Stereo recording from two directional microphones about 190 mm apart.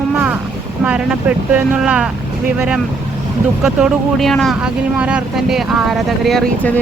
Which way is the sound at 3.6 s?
Centre (ahead or behind).